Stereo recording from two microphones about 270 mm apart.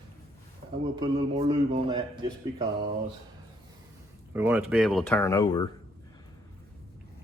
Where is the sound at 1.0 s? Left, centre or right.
Centre.